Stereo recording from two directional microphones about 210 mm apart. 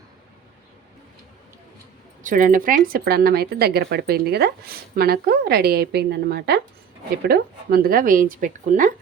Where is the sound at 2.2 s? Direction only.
40° right (ahead or behind).